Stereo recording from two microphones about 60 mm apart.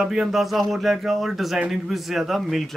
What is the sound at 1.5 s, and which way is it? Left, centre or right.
Speech, centre.